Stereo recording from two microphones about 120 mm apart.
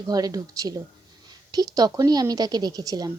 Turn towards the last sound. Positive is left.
turn(degrees=-30)  # may be behind; listen again after turning